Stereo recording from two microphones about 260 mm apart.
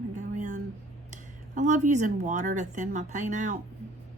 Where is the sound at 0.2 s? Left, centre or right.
Right.